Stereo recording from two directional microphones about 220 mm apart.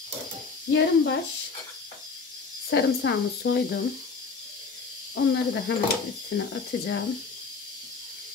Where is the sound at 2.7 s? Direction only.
50° left (ahead or behind).